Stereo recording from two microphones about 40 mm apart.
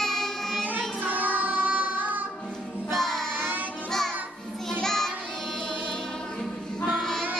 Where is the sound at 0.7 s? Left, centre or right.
Right.